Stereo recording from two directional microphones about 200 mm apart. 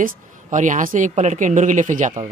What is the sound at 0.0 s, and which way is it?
Speech, 40° right (ahead or behind).